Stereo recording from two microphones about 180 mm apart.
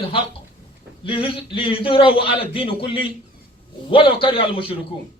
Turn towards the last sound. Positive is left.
turn(degrees=30)  # may be behind; listen again after turning